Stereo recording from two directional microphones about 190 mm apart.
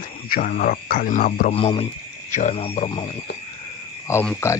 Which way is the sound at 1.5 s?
30° left (ahead or behind).